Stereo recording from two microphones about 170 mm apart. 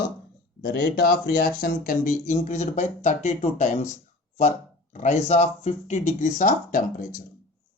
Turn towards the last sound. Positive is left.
turn(degrees=50)  # may be behind; listen again after turning